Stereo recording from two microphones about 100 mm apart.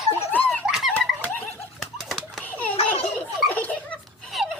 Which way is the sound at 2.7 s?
85° left.